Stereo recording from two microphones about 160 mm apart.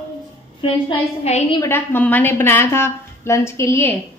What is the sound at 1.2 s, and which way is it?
Speech, 40° left (ahead or behind).